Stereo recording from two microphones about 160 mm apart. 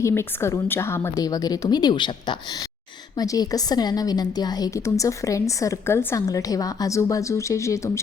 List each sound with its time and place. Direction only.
0.0 s a woman's voice: 15° left (ahead or behind)